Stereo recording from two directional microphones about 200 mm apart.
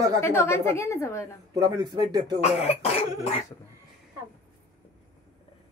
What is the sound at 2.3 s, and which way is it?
Speech, 30° left (ahead or behind).